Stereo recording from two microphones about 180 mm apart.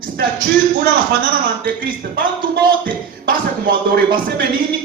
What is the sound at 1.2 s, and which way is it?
A man's voice, 50° right (ahead or behind).